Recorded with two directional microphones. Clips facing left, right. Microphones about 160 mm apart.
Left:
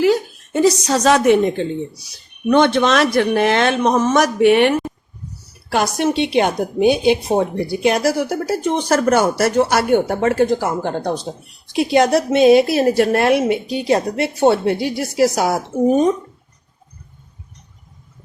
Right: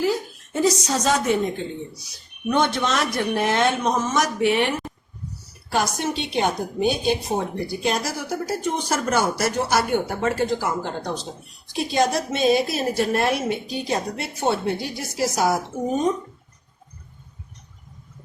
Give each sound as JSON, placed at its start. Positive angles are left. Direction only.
{"t": 0.0, "sound": "a woman's voice", "side_deg": 80}
{"t": 5.7, "sound": "a woman's voice", "side_deg": 65}
{"t": 11.7, "sound": "a woman's voice", "side_deg": 70}